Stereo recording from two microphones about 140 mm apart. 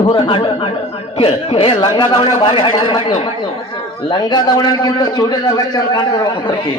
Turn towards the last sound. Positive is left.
turn(degrees=35)  # may be behind; listen again after turning